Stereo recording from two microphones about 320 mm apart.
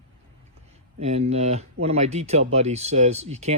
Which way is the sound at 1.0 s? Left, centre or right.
Centre.